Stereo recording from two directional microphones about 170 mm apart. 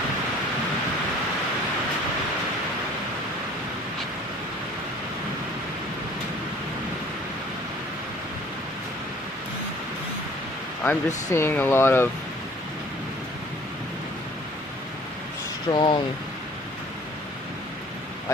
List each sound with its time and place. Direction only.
10.8 s speech: 15° left (ahead or behind)
15.7 s speech: 30° left (ahead or behind)